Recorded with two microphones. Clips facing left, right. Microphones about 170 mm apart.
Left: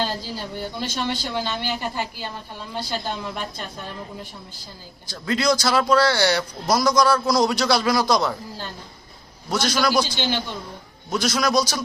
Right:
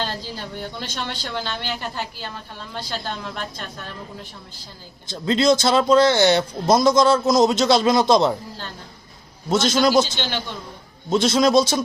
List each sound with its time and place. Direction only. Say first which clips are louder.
0.0 s a woman's voice: left 2 dB; 10° left (ahead or behind)
5.0 s speech: right 4 dB; 25° right (ahead or behind)
9.5 s speech: right 4 dB; 25° right (ahead or behind)
11.1 s speech: right 5 dB; 25° right (ahead or behind)